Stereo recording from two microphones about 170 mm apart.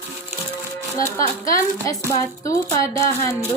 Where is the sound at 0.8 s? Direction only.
15° left (ahead or behind).